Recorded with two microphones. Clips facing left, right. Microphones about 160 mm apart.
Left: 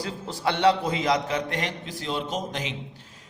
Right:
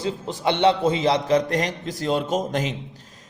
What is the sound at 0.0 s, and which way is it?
A man's voice, 20° right (ahead or behind).